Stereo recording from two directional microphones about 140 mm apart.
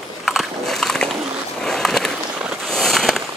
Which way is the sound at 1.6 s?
Centre (ahead or behind).